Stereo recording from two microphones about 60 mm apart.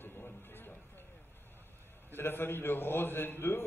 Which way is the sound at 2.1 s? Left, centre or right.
Left.